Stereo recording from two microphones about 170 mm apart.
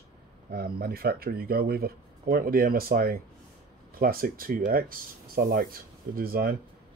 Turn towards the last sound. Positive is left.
turn(degrees=-60)  # may be behind; listen again after turning